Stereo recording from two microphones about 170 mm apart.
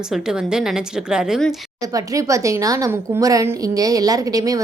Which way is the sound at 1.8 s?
20° right (ahead or behind).